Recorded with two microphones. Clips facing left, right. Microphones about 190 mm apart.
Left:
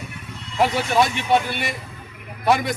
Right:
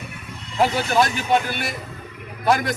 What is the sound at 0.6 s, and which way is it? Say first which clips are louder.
Speech: even; centre (ahead or behind).